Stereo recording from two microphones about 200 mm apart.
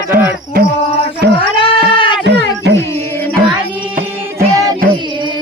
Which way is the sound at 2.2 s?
60° right (ahead or behind).